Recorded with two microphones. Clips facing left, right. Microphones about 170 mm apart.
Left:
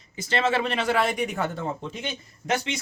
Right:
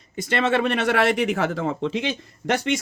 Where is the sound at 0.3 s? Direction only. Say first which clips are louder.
Right 3 dB; 55° right (ahead or behind); by 2.6 s 90° right.